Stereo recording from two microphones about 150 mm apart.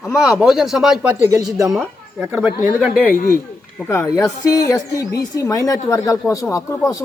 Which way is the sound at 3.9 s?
20° left (ahead or behind).